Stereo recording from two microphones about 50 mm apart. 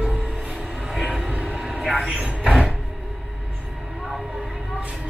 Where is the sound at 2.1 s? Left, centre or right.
Centre.